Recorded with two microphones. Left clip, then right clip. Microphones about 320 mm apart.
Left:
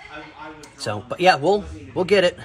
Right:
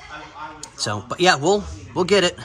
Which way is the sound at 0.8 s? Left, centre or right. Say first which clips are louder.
Right 2 dB; centre.